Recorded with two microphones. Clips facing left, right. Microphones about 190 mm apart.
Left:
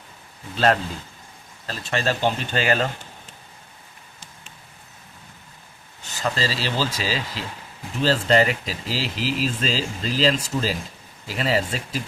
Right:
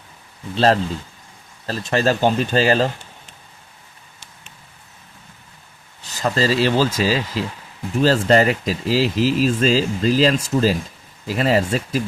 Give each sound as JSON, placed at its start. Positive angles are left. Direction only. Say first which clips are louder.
{"t": 0.5, "sound": "speech", "louder": "right 4 dB", "side_deg": -30}
{"t": 1.6, "sound": "speech", "louder": "right 6 dB", "side_deg": -40}
{"t": 6.0, "sound": "speech", "louder": "right 5 dB", "side_deg": -35}